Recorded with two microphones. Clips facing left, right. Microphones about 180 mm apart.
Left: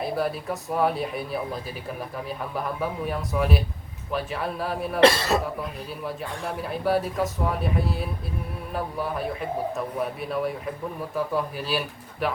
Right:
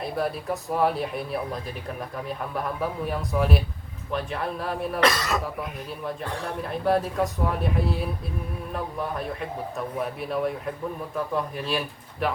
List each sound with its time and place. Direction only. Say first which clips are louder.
0.0 s a man's voice: left 1 dB; centre (ahead or behind)
4.9 s speech: left 6 dB; 30° left (ahead or behind)
6.6 s a man's voice: right 1 dB; 5° left (ahead or behind)